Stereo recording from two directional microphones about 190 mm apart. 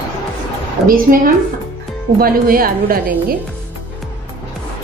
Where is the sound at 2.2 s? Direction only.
50° right (ahead or behind).